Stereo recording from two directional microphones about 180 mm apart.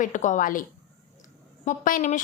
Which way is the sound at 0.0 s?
45° left (ahead or behind).